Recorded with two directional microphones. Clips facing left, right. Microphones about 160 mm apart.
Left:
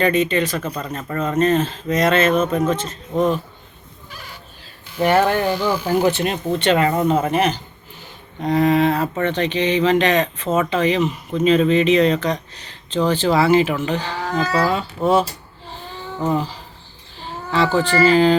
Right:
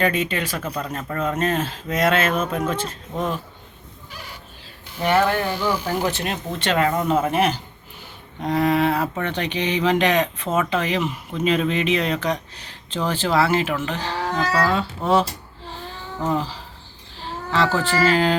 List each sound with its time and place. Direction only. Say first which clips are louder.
0.0 s speech: left 5 dB; 10° right (ahead or behind)
5.0 s speech: left 3 dB; 45° left (ahead or behind)
6.0 s speech: left 6 dB; centre (ahead or behind)
16.2 s speech: left 2 dB; 5° left (ahead or behind)